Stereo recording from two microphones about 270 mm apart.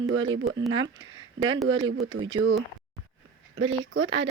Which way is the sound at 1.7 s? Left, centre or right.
Right.